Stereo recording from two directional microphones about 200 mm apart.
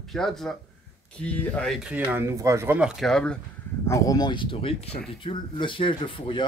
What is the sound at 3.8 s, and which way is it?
A man's voice, 15° left (ahead or behind).